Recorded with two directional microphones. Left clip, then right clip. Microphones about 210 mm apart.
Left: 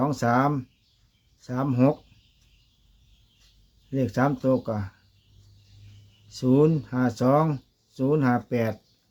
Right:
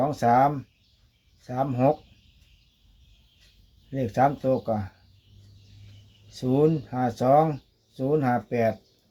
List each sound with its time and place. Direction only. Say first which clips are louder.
0.0 s speech: right 3 dB; 40° left (ahead or behind)
3.9 s speech: right 2 dB; 40° left (ahead or behind)
6.4 s speech: left 1 dB; 35° left (ahead or behind)